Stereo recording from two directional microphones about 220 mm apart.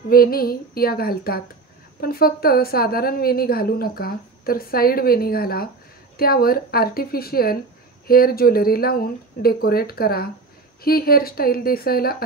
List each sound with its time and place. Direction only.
0.1 s a woman's voice: 40° left (ahead or behind)